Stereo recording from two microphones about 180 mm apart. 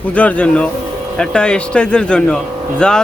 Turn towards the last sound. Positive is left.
turn(degrees=5)  # may be behind; listen again after turning